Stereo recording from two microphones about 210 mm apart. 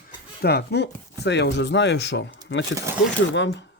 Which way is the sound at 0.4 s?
50° left (ahead or behind).